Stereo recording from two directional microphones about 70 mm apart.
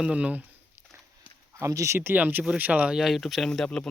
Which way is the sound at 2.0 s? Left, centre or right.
Right.